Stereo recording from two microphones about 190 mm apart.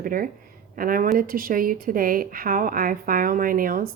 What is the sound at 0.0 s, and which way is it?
A woman's voice, 45° right (ahead or behind).